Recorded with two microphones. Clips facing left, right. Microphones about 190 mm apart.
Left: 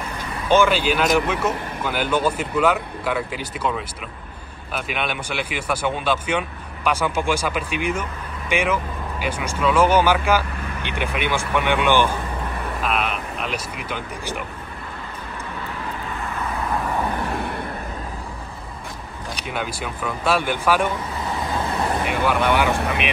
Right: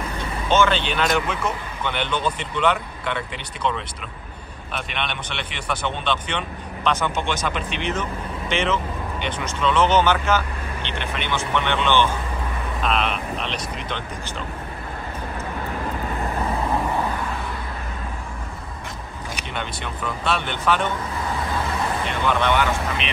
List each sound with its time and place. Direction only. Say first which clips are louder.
0.5 s speech: left 3 dB; 10° left (ahead or behind)
17.3 s a sound: left 4 dB; 60° left (ahead or behind)
19.5 s speech: left 4 dB; 5° left (ahead or behind)
22.0 s speech: left 1 dB; 10° left (ahead or behind)
22.8 s speech: left 3 dB; 60° left (ahead or behind)